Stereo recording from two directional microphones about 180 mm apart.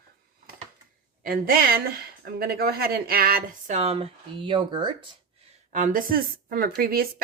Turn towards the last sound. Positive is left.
turn(degrees=-55)  # may be behind; listen again after turning